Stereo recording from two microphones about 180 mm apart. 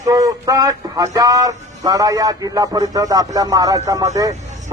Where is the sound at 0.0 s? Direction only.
20° right (ahead or behind).